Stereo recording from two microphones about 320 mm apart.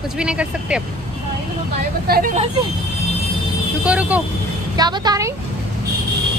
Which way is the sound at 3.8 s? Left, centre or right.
Centre.